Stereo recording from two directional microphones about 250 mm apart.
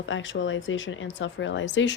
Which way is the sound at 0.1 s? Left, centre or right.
Left.